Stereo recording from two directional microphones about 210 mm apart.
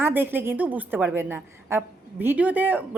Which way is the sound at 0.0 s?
10° right (ahead or behind).